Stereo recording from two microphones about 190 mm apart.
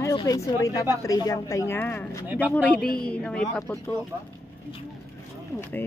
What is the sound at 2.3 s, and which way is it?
Speech, 10° right (ahead or behind).